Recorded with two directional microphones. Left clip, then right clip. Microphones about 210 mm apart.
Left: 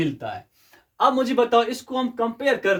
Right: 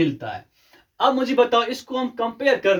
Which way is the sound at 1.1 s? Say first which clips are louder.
Right 1 dB; 30° left (ahead or behind).